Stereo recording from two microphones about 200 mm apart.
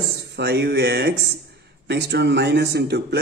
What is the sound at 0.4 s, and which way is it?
Speech, 55° right (ahead or behind).